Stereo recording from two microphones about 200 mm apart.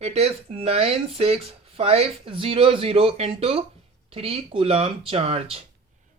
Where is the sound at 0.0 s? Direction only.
30° right (ahead or behind).